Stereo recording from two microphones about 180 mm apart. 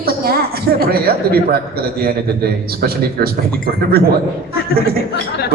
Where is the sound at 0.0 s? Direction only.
55° right (ahead or behind).